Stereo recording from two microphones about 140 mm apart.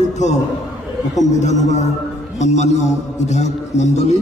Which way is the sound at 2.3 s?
55° left (ahead or behind).